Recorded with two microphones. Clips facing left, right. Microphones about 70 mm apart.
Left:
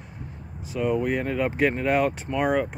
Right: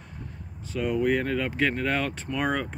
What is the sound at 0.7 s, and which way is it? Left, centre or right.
Speech, centre.